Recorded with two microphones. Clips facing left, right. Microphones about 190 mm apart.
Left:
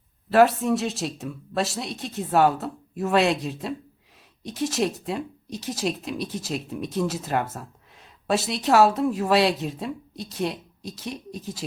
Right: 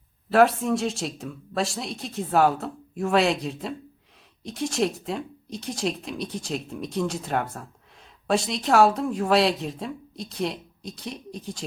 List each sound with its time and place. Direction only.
0.3 s speech: centre (ahead or behind)